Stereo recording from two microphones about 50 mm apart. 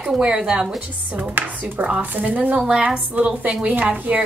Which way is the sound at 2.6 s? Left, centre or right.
Right.